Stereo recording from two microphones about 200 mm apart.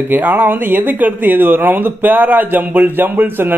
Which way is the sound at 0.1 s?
10° right (ahead or behind).